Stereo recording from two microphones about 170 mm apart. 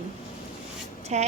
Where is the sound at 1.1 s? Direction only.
45° right (ahead or behind).